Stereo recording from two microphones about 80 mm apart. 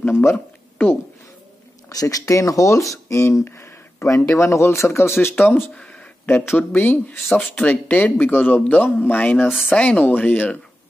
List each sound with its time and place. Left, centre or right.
0.0 s speech: left
1.9 s speech: left
9.5 s speech: centre
9.8 s speech: centre